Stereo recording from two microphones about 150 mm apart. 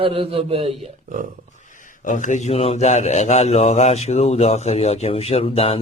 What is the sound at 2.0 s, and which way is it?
Speech, 55° left (ahead or behind).